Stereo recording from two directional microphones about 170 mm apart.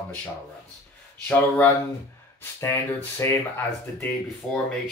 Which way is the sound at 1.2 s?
10° left (ahead or behind).